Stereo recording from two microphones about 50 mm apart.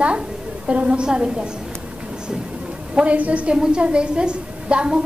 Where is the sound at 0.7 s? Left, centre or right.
Right.